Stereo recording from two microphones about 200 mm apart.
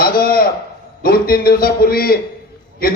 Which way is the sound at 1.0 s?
50° left (ahead or behind).